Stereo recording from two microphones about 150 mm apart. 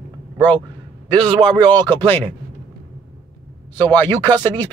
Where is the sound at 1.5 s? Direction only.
30° right (ahead or behind).